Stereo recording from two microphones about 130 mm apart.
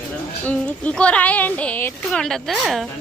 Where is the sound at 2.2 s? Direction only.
5° left (ahead or behind).